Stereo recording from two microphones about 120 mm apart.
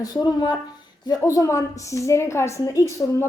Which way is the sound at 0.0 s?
35° left (ahead or behind).